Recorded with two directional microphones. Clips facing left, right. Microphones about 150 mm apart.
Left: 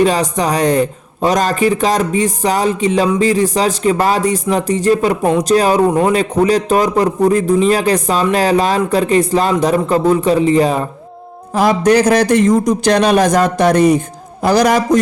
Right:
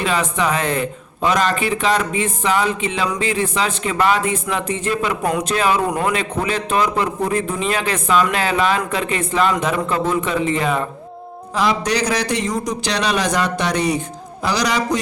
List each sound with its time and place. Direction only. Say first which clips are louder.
0.0 s a man's voice: left 6 dB; 40° left (ahead or behind)
5.9 s a man's voice: left 7 dB; 25° left (ahead or behind)
6.1 s a man's voice: left 9 dB; 40° left (ahead or behind)
11.5 s a man's voice: left 8 dB; 45° left (ahead or behind)